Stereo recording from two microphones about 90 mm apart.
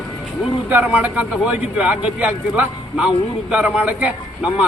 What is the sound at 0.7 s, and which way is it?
A man's voice, 15° right (ahead or behind).